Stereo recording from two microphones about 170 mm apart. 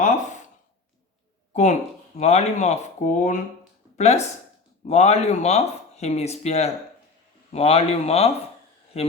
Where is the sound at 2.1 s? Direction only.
40° left (ahead or behind).